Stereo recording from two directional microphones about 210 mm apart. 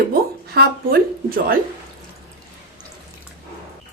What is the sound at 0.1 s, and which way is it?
Speech, 45° right (ahead or behind).